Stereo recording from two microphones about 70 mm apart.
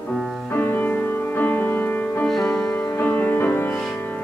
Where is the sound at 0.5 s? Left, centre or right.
Left.